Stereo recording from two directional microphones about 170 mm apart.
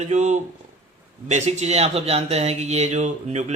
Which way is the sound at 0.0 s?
45° right (ahead or behind).